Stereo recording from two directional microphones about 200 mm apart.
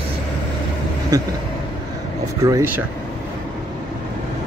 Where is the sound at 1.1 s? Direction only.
15° right (ahead or behind).